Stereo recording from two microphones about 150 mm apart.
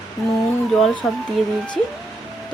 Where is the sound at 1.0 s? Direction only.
5° left (ahead or behind).